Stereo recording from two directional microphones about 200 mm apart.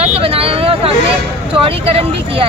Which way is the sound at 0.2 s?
30° right (ahead or behind).